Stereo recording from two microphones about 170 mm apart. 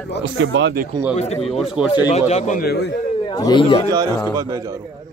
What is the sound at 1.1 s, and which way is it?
Speech, 40° left (ahead or behind).